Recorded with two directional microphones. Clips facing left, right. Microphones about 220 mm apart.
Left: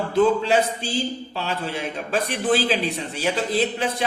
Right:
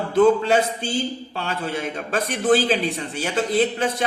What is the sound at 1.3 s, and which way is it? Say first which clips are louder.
A man's voice: right 1 dB; 50° right (ahead or behind).